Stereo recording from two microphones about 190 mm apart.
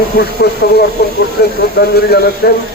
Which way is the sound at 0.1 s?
55° left (ahead or behind).